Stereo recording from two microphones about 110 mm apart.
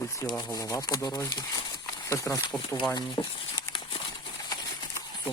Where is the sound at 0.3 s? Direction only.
40° left (ahead or behind).